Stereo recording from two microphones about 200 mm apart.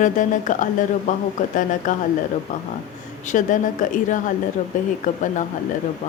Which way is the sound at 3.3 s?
40° left (ahead or behind).